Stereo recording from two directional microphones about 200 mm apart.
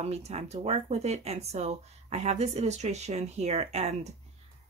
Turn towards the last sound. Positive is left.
turn(degrees=-30)  # may be behind; listen again after turning